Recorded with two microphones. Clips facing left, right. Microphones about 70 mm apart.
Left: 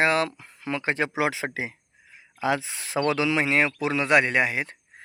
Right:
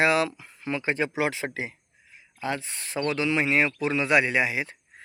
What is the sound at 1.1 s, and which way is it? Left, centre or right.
Speech, left.